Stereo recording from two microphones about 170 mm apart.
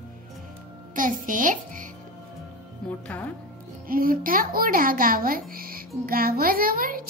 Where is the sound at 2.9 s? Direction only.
10° left (ahead or behind).